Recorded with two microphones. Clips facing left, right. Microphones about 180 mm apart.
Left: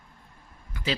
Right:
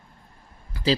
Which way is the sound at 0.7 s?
35° right (ahead or behind).